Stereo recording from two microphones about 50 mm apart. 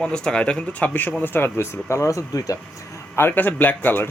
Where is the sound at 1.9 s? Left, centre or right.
Left.